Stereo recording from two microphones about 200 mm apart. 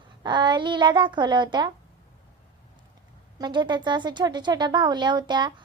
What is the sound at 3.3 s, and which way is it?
Speech, 20° right (ahead or behind).